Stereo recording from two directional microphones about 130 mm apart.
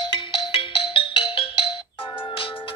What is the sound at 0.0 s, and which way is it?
Ringtone, 40° left (ahead or behind).